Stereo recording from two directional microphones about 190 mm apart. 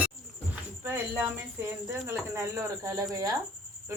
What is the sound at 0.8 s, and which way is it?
Speech, 10° right (ahead or behind).